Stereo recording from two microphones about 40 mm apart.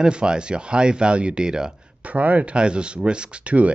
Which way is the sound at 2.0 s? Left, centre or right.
Right.